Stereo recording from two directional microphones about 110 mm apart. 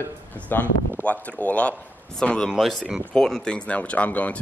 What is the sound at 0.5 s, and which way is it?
Speech, 20° left (ahead or behind).